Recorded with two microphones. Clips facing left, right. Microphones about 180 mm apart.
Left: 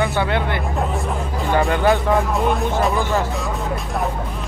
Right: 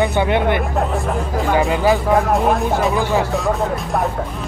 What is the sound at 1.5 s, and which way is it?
Speech, 5° right (ahead or behind).